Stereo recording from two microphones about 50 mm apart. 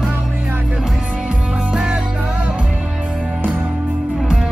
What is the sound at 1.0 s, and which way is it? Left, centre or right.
Music, centre.